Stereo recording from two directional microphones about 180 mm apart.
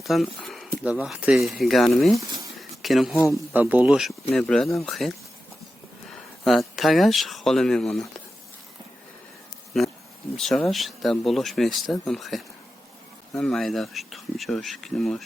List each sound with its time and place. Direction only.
0.0 s speech: centre (ahead or behind)
2.1 s speech: 20° right (ahead or behind)
2.6 s a sound: centre (ahead or behind)
3.5 s speech: 10° right (ahead or behind)
10.3 s speech: centre (ahead or behind)